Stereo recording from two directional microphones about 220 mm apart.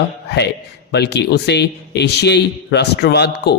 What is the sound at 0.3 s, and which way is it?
A man's voice, 50° left (ahead or behind).